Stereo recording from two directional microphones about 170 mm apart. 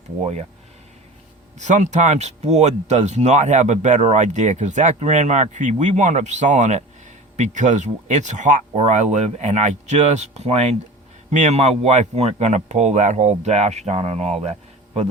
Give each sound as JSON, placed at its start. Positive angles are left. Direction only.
{"t": 1.5, "sound": "speech", "side_deg": -45}